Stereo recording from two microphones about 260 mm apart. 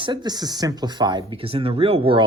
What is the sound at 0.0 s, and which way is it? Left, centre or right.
Speech, centre.